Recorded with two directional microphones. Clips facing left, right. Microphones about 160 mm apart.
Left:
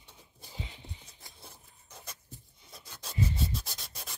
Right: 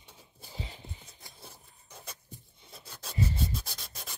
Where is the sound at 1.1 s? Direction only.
Centre (ahead or behind).